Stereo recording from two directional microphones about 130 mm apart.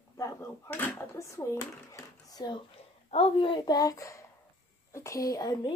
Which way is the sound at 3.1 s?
50° left (ahead or behind).